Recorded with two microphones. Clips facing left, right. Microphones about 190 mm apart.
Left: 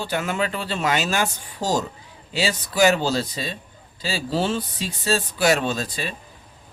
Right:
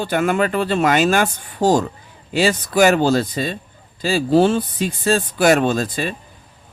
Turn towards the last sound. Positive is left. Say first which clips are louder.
# right 7 dB
turn(degrees=-50)  # may be behind; listen again after turning